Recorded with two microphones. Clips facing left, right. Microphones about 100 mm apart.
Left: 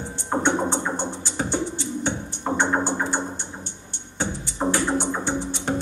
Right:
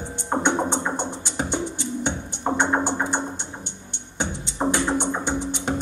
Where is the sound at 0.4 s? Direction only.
20° right (ahead or behind).